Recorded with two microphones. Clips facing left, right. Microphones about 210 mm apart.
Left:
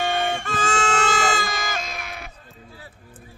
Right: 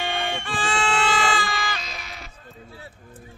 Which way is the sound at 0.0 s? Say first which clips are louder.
Left 4 dB; 45° left (ahead or behind).